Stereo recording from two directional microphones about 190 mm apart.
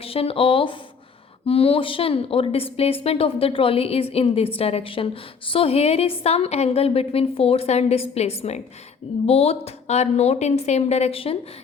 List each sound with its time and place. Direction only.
0.0 s a woman's voice: 30° left (ahead or behind)